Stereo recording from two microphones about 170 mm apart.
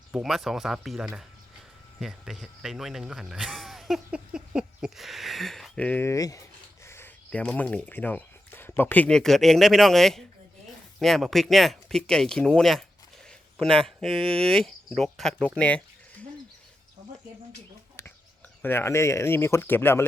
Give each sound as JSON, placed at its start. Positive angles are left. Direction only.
{"t": 0.1, "sound": "speech", "side_deg": 0}
{"t": 14.2, "sound": "speech", "side_deg": -35}
{"t": 14.5, "sound": "speech", "side_deg": 5}
{"t": 18.6, "sound": "speech", "side_deg": 15}